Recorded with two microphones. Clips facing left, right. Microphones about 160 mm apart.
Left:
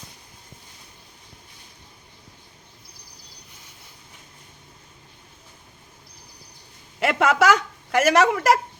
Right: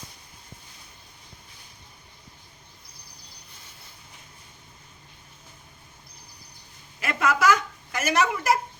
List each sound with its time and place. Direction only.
7.0 s a woman's voice: 80° left